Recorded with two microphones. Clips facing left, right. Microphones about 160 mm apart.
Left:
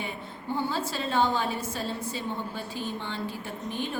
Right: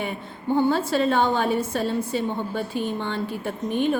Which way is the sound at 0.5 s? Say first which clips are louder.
Right 9 dB; 60° right (ahead or behind).